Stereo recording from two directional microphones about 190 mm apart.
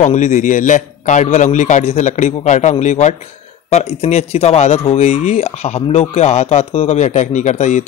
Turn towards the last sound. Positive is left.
turn(degrees=40)  # may be behind; listen again after turning